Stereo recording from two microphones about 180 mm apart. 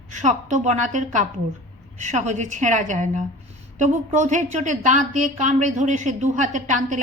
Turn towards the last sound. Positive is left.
turn(degrees=-45)  # may be behind; listen again after turning